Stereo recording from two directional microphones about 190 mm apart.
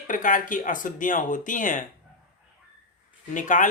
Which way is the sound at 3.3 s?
40° left (ahead or behind).